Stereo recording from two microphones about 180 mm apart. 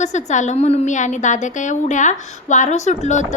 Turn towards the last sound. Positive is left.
turn(degrees=40)  # may be behind; listen again after turning